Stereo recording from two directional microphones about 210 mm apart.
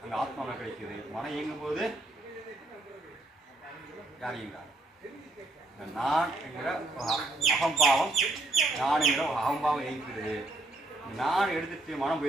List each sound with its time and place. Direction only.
0.1 s speech: centre (ahead or behind)
4.2 s a man's voice: centre (ahead or behind)
5.8 s speech: centre (ahead or behind)
11.2 s speech: centre (ahead or behind)